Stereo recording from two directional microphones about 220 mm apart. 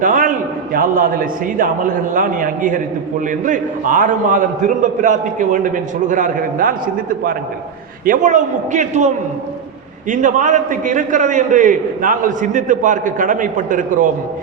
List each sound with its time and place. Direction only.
0.0 s a man's voice: 35° right (ahead or behind)